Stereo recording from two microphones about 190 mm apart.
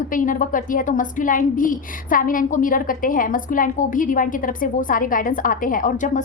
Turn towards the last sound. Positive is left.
turn(degrees=45)  # may be behind; listen again after turning